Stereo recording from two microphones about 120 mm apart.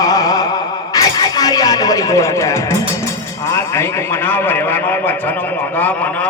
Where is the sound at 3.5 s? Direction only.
20° left (ahead or behind).